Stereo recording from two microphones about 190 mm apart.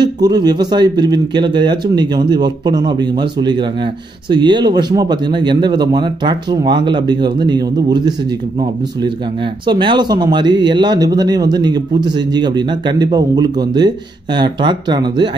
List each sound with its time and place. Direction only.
0.0 s speech: 20° right (ahead or behind)